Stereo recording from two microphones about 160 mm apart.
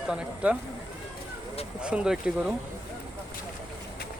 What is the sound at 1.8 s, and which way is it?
Speech, 5° right (ahead or behind).